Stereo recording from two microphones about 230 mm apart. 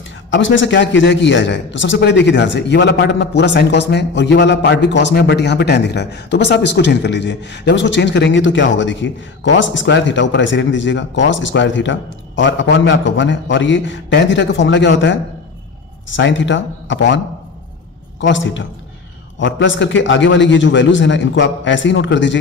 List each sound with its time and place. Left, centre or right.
0.3 s a man's voice: left
18.2 s a man's voice: left